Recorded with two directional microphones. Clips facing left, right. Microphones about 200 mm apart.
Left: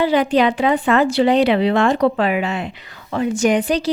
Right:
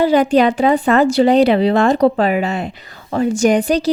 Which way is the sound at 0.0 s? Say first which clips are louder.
Right 3 dB; 45° right (ahead or behind).